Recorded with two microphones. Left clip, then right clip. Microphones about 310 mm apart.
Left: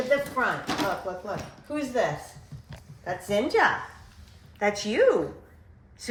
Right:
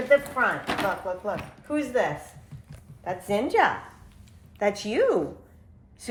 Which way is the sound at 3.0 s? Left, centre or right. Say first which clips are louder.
Even; right.